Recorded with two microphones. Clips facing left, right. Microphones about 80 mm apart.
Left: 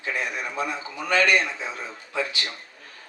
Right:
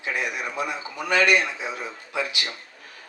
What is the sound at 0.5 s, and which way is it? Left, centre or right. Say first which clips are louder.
A man's voice: even; centre.